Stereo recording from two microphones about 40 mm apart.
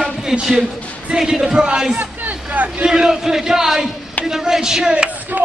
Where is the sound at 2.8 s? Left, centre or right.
Centre.